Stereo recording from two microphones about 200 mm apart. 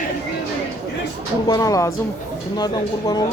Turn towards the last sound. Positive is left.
turn(degrees=20)  # may be behind; listen again after turning